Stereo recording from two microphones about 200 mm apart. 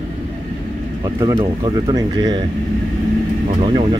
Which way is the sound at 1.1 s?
20° right (ahead or behind).